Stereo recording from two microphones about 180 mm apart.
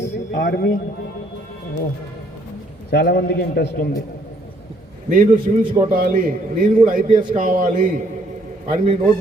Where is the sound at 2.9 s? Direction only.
65° left (ahead or behind).